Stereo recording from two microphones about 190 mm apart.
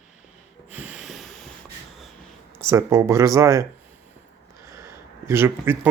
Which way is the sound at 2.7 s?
15° right (ahead or behind).